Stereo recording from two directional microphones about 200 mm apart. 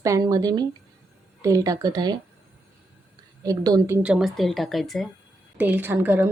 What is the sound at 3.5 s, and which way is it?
Speech, 20° right (ahead or behind).